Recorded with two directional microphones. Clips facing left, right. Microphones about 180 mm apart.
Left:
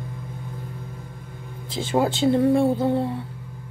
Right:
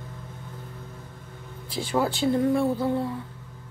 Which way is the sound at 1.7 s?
25° left (ahead or behind).